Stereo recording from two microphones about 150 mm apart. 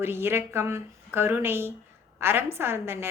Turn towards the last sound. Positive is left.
turn(degrees=-15)  # may be behind; listen again after turning